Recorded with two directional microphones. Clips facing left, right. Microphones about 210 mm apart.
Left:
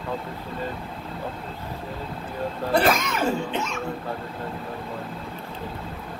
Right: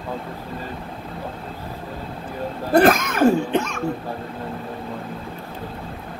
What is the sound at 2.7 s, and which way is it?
Speech, 50° right (ahead or behind).